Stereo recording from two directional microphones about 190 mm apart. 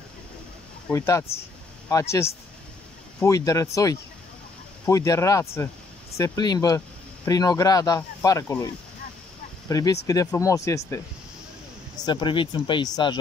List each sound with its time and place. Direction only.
0.9 s speech: 15° left (ahead or behind)
9.7 s speech: 20° left (ahead or behind)
12.0 s speech: 25° left (ahead or behind)